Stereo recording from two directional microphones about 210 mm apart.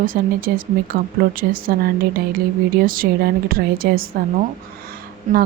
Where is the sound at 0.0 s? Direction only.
40° right (ahead or behind).